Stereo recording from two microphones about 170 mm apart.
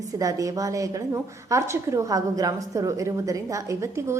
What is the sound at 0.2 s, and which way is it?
A woman's voice, 20° right (ahead or behind).